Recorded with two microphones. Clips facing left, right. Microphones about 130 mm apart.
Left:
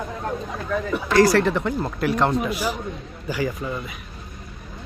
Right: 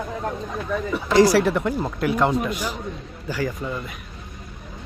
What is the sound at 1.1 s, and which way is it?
A man's voice, 15° right (ahead or behind).